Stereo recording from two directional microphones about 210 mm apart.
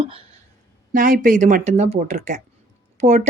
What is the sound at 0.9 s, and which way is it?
Speech, 40° right (ahead or behind).